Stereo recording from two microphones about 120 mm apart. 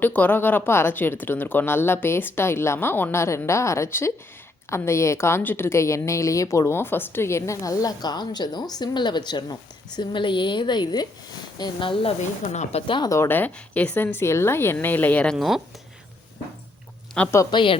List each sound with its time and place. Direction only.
0.0 s a woman's voice: 15° left (ahead or behind); by 12.1 s 45° left (ahead or behind)
12.5 s a woman's voice: 70° left (ahead or behind)
13.1 s a woman's voice: 20° left (ahead or behind); by 15.6 s centre (ahead or behind)
17.2 s a woman's voice: 10° left (ahead or behind)
17.5 s speech: 45° left (ahead or behind)